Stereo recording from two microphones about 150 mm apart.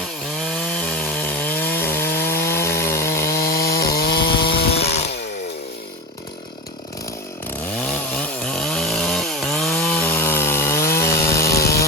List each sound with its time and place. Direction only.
0.4 s wood: 5° left (ahead or behind)
3.3 s chainsaw: 90° left
7.8 s chainsaw: 5° left (ahead or behind)
10.0 s chainsaw: 15° left (ahead or behind)